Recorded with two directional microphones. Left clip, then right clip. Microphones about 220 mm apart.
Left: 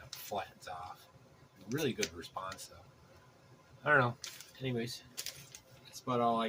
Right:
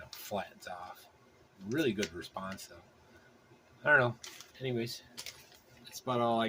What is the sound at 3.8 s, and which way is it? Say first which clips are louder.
Speech: right 2 dB; 35° right (ahead or behind).